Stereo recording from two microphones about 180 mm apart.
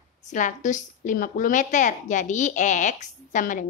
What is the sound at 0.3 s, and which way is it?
A woman's voice, 45° left (ahead or behind).